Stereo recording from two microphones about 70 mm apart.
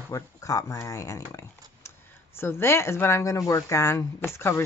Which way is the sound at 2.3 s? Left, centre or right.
Left.